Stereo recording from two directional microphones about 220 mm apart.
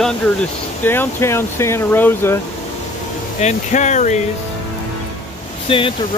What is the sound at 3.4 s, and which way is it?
Speech, 30° left (ahead or behind).